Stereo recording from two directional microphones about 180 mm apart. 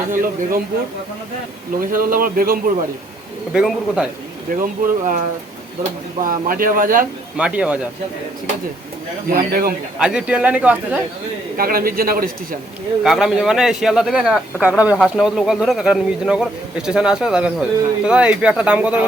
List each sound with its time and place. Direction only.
0.1 s a man's voice: 50° right (ahead or behind)
1.8 s a man's voice: 50° right (ahead or behind)
3.5 s speech: 5° right (ahead or behind)
4.6 s a man's voice: 45° right (ahead or behind)
6.2 s a man's voice: 50° right (ahead or behind)
7.3 s speech: 5° right (ahead or behind)
9.3 s speech: 55° right (ahead or behind)
10.0 s speech: 5° right (ahead or behind)
11.5 s a man's voice: 55° right (ahead or behind)
13.0 s speech: centre (ahead or behind)